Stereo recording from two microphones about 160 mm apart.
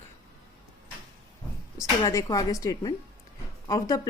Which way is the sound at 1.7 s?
20° left (ahead or behind).